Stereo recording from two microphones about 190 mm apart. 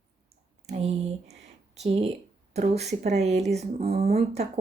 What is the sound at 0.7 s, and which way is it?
Speech, 35° right (ahead or behind).